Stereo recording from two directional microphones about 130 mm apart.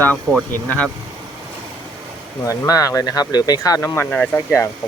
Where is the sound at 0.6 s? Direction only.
10° left (ahead or behind).